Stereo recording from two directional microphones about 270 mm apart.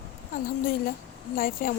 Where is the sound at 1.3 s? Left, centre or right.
Left.